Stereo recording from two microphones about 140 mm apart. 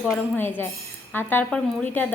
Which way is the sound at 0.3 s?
15° left (ahead or behind).